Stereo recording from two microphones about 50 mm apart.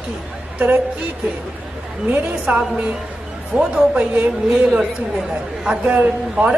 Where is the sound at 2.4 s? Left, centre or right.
Right.